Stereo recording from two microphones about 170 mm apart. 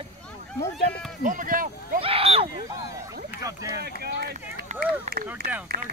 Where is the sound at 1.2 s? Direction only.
50° right (ahead or behind).